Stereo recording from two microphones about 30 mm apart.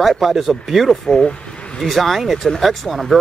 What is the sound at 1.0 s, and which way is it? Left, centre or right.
Speech, left.